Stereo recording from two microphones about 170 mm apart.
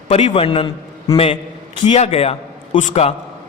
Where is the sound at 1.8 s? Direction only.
35° left (ahead or behind).